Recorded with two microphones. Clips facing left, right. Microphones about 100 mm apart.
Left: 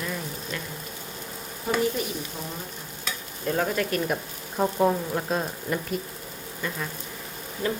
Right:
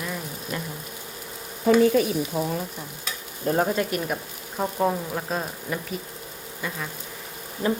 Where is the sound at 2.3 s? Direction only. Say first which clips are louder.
Right 10 dB; 70° right (ahead or behind).